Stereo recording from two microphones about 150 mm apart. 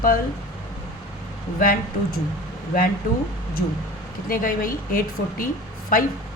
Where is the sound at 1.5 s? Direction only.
80° left.